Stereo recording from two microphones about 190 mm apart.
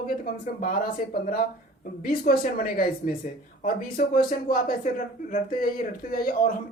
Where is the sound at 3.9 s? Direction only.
50° left (ahead or behind).